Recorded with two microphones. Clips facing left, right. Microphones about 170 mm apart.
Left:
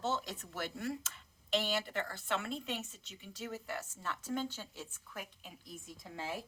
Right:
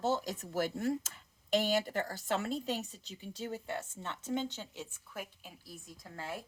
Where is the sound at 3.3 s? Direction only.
30° right (ahead or behind).